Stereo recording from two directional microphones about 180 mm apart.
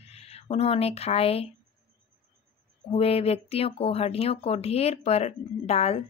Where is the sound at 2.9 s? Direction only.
35° left (ahead or behind).